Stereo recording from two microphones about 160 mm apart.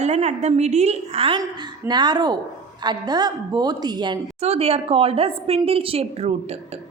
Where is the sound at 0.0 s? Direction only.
45° right (ahead or behind); by 4.2 s 25° right (ahead or behind).